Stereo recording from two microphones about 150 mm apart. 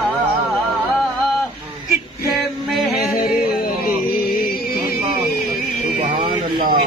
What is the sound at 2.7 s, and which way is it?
Music, centre (ahead or behind).